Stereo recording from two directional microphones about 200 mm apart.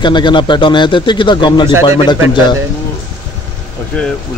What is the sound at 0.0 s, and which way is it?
Speech, 20° left (ahead or behind).